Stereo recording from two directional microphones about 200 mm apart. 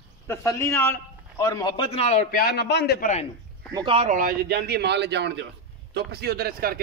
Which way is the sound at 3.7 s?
25° right (ahead or behind).